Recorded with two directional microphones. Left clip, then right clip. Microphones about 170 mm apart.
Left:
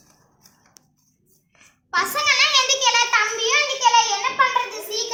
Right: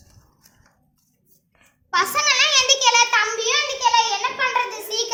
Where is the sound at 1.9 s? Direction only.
60° right (ahead or behind).